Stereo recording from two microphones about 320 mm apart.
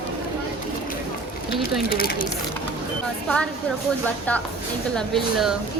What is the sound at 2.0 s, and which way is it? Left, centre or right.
Speech, left.